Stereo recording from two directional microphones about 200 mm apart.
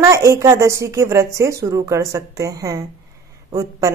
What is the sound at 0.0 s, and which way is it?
Speech, 15° right (ahead or behind).